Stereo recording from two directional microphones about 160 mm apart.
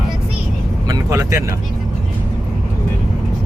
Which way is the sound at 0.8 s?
20° right (ahead or behind).